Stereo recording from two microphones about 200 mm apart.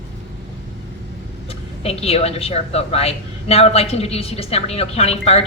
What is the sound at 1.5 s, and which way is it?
A woman's voice, 30° left (ahead or behind).